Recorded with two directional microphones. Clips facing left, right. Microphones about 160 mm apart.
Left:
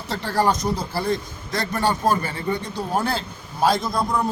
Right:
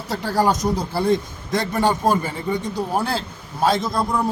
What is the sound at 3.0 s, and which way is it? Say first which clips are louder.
A man's voice: right 1 dB; centre (ahead or behind).